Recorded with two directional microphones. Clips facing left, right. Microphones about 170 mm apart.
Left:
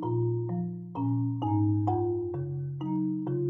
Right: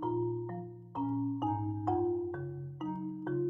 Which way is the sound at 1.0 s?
5° left (ahead or behind).